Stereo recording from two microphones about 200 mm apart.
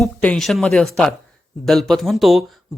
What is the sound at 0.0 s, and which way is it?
Speech, 5° left (ahead or behind).